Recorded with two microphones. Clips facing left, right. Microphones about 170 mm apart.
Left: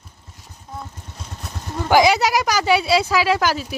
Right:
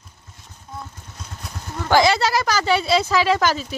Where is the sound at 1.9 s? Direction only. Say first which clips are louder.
Left 2 dB; 10° left (ahead or behind).